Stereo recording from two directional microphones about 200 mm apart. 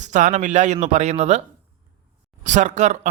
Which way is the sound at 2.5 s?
35° right (ahead or behind).